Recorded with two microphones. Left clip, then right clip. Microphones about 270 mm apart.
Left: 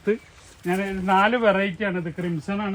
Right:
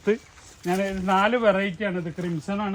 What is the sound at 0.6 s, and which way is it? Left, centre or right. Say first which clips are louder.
Speech: even; centre.